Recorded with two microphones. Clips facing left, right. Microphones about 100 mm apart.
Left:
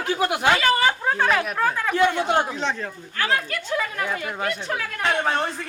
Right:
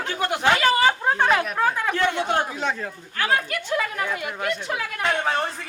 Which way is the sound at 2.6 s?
10° right (ahead or behind).